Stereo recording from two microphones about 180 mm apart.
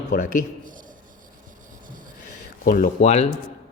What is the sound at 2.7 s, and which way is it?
Speech, 45° left (ahead or behind).